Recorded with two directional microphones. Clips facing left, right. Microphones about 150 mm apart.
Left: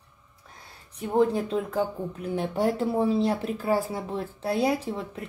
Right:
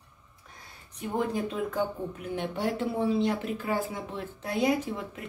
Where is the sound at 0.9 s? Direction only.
30° left (ahead or behind).